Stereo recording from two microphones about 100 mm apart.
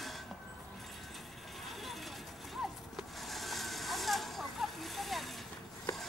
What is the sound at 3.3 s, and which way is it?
Vehicle, centre (ahead or behind).